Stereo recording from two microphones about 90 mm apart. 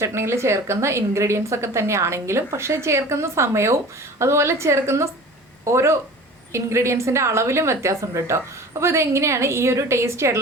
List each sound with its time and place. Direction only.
0.0 s a woman's voice: 30° right (ahead or behind)